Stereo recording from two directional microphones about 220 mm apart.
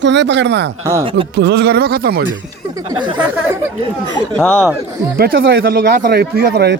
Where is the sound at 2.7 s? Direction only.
20° right (ahead or behind).